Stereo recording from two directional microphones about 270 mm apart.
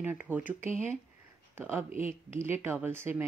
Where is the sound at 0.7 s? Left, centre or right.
Left.